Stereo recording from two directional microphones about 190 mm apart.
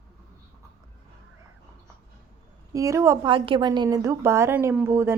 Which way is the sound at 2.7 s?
15° right (ahead or behind).